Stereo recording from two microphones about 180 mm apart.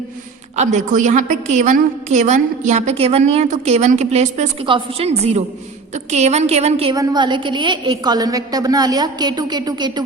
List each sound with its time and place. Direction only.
0.5 s a woman's voice: 40° right (ahead or behind)
6.9 s a woman's voice: 20° right (ahead or behind)